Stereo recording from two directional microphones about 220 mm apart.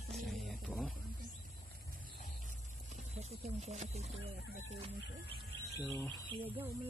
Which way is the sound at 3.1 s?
30° right (ahead or behind).